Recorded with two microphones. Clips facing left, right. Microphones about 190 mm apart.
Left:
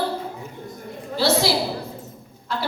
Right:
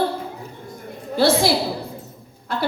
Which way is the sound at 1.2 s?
55° right (ahead or behind).